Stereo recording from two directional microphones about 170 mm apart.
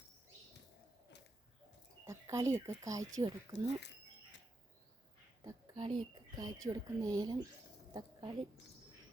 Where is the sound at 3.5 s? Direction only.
90° left.